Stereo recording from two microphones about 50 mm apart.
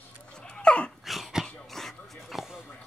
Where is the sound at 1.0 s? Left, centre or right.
Centre.